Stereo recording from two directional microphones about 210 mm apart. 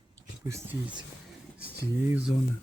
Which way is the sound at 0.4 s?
10° right (ahead or behind).